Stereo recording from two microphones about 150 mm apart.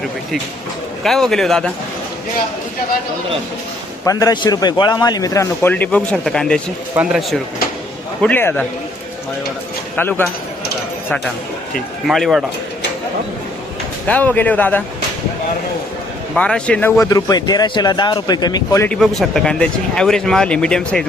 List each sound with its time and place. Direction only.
1.0 s speech: centre (ahead or behind)
4.0 s a man's voice: 25° left (ahead or behind); by 7.4 s centre (ahead or behind)
8.2 s speech: 10° left (ahead or behind)
9.9 s speech: 10° left (ahead or behind)
12.0 s speech: centre (ahead or behind)
14.1 s speech: 10° left (ahead or behind)
16.3 s speech: 5° left (ahead or behind)
17.0 s a man's voice: 25° left (ahead or behind)
18.9 s speech: centre (ahead or behind)